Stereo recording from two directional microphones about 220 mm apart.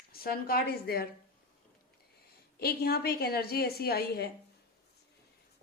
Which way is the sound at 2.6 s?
45° left (ahead or behind).